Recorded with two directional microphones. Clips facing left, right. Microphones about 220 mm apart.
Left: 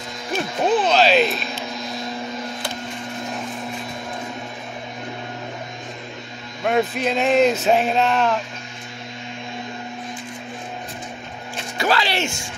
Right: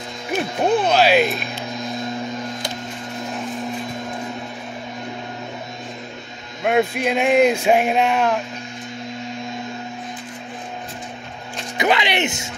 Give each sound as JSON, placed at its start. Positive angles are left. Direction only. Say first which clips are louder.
{"t": 0.3, "sound": "speech", "louder": "right 1 dB", "side_deg": -10}
{"t": 6.6, "sound": "speech", "louder": "right 2 dB", "side_deg": -10}
{"t": 11.7, "sound": "speech", "louder": "right 2 dB", "side_deg": -20}